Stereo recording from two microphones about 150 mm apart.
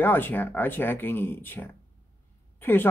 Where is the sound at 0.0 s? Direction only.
15° left (ahead or behind).